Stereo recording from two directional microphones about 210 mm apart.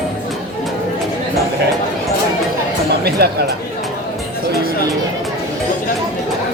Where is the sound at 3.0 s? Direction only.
50° right (ahead or behind).